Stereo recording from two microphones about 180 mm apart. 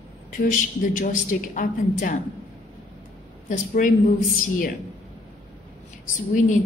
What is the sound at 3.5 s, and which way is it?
Speech, 45° left (ahead or behind).